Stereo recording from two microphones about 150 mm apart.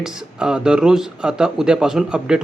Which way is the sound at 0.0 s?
5° right (ahead or behind).